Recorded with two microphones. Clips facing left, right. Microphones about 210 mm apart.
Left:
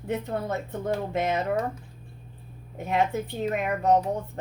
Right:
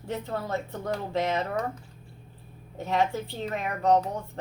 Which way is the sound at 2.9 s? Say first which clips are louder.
Left 1 dB; 20° left (ahead or behind).